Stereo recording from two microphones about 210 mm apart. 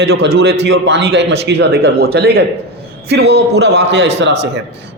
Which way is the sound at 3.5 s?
50° right (ahead or behind).